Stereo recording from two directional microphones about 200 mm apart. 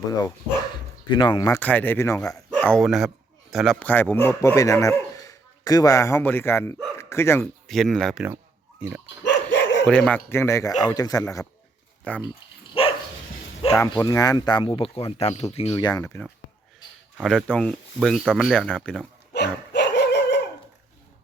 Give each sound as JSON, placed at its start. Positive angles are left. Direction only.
{"t": 0.2, "sound": "speech", "side_deg": 20}
{"t": 2.6, "sound": "speech", "side_deg": 5}
{"t": 7.0, "sound": "bow-wow", "side_deg": 15}
{"t": 7.7, "sound": "speech", "side_deg": 0}
{"t": 9.0, "sound": "dog", "side_deg": 65}
{"t": 9.8, "sound": "speech", "side_deg": 5}
{"t": 12.8, "sound": "dog", "side_deg": 30}
{"t": 13.7, "sound": "speech", "side_deg": 15}
{"t": 17.2, "sound": "speech", "side_deg": 0}
{"t": 19.3, "sound": "dog", "side_deg": 60}